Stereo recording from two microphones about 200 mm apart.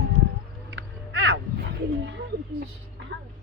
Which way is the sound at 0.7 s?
65° right (ahead or behind).